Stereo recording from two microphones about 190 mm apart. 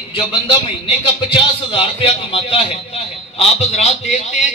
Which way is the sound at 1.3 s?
30° left (ahead or behind).